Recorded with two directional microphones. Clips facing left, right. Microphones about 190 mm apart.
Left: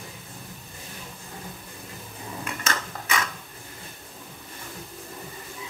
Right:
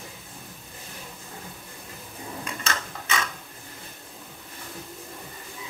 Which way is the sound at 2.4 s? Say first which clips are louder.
Left 2 dB; 30° right (ahead or behind).